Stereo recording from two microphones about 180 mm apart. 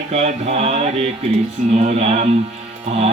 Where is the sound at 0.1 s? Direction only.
40° right (ahead or behind).